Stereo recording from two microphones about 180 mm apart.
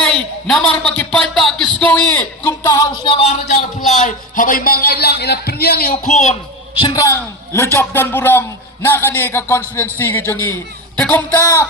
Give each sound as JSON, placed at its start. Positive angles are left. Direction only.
{"t": 0.0, "sound": "music", "side_deg": 5}
{"t": 1.8, "sound": "a man's voice", "side_deg": 5}
{"t": 3.2, "sound": "a man's voice", "side_deg": 40}
{"t": 6.7, "sound": "a man's voice", "side_deg": 25}